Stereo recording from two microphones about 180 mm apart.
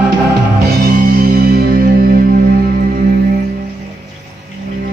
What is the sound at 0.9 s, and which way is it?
Music, 55° right (ahead or behind).